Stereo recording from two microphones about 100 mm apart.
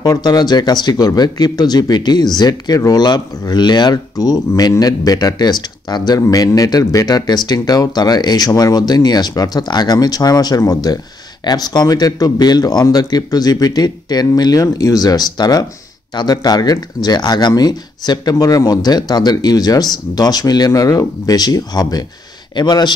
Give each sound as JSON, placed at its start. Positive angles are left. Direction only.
{"t": 0.0, "sound": "speech", "side_deg": 40}